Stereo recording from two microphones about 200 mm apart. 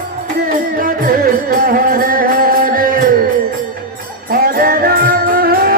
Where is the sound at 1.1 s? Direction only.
45° right (ahead or behind).